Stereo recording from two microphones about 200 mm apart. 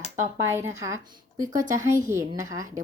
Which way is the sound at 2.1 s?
15° right (ahead or behind).